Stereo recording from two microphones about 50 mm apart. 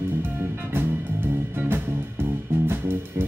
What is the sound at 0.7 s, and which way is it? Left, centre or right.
Music, right.